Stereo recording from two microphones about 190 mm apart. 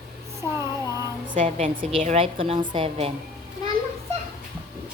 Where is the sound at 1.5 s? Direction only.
30° right (ahead or behind).